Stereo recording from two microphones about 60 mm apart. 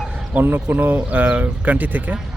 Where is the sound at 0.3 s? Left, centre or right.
Right.